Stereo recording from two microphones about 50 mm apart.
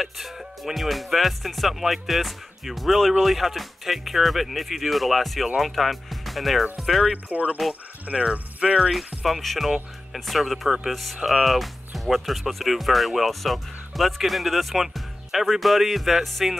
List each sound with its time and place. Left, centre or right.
0.0 s speech: centre
7.2 s speech: right
8.1 s speech: centre
8.7 s speech: centre